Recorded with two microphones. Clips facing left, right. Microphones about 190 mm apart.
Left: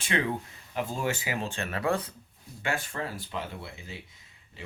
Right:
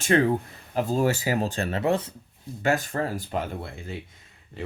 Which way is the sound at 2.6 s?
40° right (ahead or behind).